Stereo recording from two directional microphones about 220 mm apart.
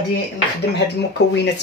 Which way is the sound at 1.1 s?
50° left (ahead or behind).